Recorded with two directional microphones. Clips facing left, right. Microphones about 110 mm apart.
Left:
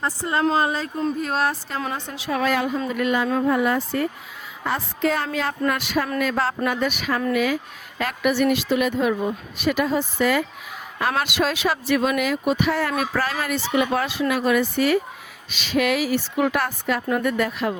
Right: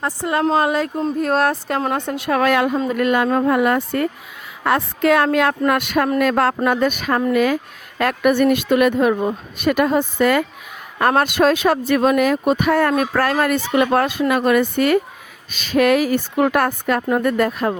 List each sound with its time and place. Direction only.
0.0 s a woman's voice: 65° right (ahead or behind); by 17.7 s 45° right (ahead or behind)